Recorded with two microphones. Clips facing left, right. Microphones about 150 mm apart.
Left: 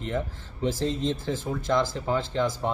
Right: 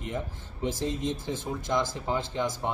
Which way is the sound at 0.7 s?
15° right (ahead or behind).